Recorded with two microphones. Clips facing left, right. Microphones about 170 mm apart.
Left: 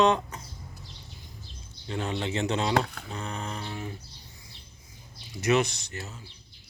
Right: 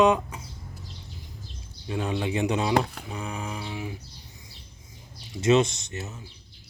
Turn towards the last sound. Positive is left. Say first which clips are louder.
# right 3 dB
turn(degrees=-20)  # may be behind; listen again after turning